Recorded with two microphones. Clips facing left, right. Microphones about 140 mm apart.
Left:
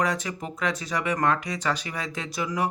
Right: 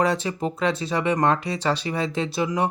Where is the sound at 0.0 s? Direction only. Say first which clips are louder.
Right 5 dB; 30° right (ahead or behind).